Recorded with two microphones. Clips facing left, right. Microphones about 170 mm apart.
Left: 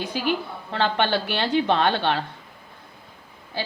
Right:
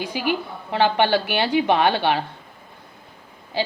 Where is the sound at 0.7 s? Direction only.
15° right (ahead or behind).